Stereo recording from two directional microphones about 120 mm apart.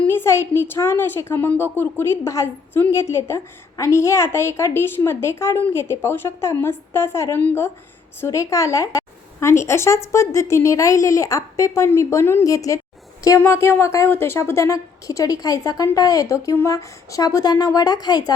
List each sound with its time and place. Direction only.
0.0 s a woman's voice: 20° left (ahead or behind); by 18.3 s 35° left (ahead or behind)